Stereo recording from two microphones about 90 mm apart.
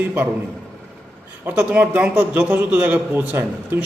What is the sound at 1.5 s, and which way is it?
A man's voice, 20° right (ahead or behind).